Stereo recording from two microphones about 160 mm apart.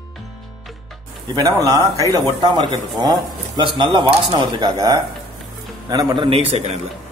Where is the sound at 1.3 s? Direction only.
20° right (ahead or behind); by 6.7 s 40° right (ahead or behind).